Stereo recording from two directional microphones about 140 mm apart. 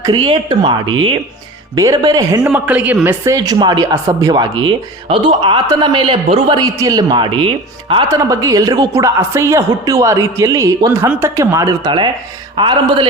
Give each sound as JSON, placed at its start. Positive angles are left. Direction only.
{"t": 0.0, "sound": "speech", "side_deg": -35}
{"t": 2.4, "sound": "a man's voice", "side_deg": -10}
{"t": 3.2, "sound": "speech", "side_deg": -25}
{"t": 6.6, "sound": "speech", "side_deg": -25}
{"t": 8.0, "sound": "speech", "side_deg": -25}